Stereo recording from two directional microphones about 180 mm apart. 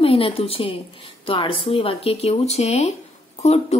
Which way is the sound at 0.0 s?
30° left (ahead or behind).